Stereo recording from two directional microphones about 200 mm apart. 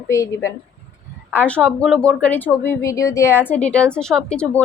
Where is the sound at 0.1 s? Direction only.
15° left (ahead or behind).